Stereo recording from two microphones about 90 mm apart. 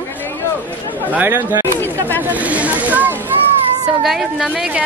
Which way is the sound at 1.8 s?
20° left (ahead or behind).